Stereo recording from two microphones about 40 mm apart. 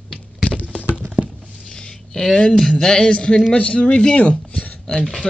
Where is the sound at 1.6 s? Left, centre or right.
Centre.